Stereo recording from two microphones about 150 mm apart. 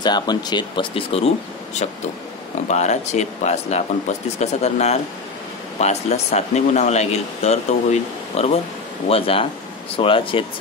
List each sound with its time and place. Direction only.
0.0 s speech: 30° left (ahead or behind)